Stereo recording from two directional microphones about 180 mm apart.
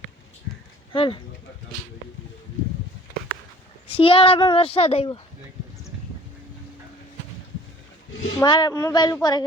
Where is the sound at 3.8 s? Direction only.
30° left (ahead or behind).